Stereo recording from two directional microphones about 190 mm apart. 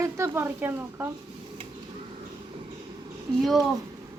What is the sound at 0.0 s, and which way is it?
Speech, 15° right (ahead or behind).